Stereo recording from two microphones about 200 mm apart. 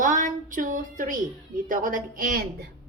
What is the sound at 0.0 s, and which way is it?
A woman's voice, 40° right (ahead or behind).